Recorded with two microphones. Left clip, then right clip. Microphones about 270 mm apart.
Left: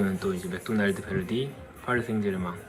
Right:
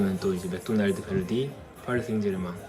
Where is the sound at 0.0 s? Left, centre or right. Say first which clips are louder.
Right 1 dB; centre.